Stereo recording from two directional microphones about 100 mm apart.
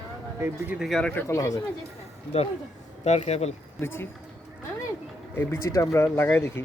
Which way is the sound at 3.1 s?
90° left.